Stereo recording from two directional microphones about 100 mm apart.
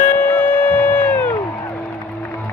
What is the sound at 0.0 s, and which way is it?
Music, 15° left (ahead or behind).